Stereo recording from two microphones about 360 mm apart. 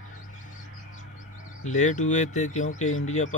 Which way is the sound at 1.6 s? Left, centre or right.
Centre.